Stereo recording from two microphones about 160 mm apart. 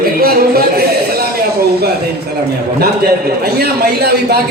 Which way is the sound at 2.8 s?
80° right.